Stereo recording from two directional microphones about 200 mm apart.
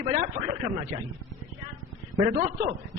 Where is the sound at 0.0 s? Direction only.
30° right (ahead or behind).